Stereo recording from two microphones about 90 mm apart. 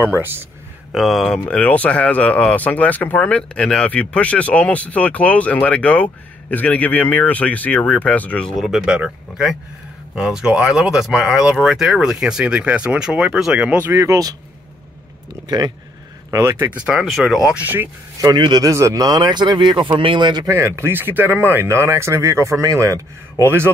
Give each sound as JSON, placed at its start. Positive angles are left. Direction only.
{"t": 0.0, "sound": "speech", "side_deg": -25}
{"t": 0.9, "sound": "speech", "side_deg": 0}
{"t": 1.5, "sound": "speech", "side_deg": 15}
{"t": 13.9, "sound": "speech", "side_deg": -35}
{"t": 15.4, "sound": "speech", "side_deg": -50}
{"t": 16.3, "sound": "speech", "side_deg": -35}
{"t": 16.7, "sound": "speech", "side_deg": -10}
{"t": 17.0, "sound": "speech", "side_deg": 0}
{"t": 17.5, "sound": "speech", "side_deg": -20}
{"t": 18.2, "sound": "speech", "side_deg": -50}
{"t": 18.7, "sound": "speech", "side_deg": -35}
{"t": 20.4, "sound": "speech", "side_deg": -30}
{"t": 23.4, "sound": "speech", "side_deg": -25}